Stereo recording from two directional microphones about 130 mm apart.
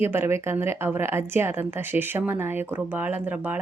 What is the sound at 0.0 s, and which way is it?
Speech, 15° right (ahead or behind).